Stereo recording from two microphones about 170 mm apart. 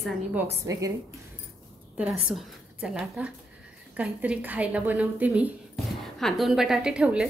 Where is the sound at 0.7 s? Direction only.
20° right (ahead or behind).